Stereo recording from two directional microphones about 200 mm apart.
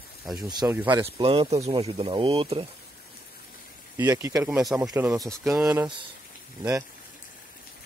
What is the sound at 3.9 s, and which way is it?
Speech, 15° right (ahead or behind).